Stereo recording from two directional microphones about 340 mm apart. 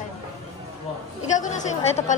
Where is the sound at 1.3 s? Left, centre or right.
Left.